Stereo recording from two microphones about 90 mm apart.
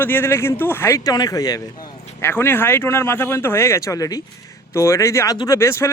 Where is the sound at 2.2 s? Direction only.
25° left (ahead or behind).